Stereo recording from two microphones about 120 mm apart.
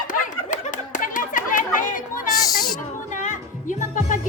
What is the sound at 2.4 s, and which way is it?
Owl, 35° left (ahead or behind).